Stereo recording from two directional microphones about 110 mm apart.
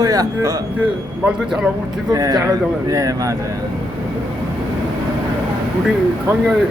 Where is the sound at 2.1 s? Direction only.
35° right (ahead or behind).